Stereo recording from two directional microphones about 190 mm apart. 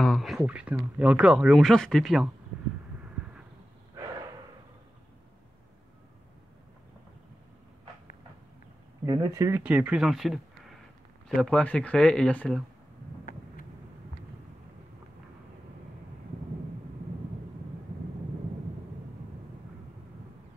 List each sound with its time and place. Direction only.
0.0 s speech: centre (ahead or behind)
9.0 s speech: 20° right (ahead or behind); by 12.6 s 5° left (ahead or behind)
13.2 s vehicle: 45° left (ahead or behind)